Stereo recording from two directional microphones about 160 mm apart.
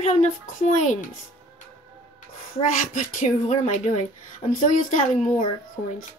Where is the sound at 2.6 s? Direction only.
55° left (ahead or behind).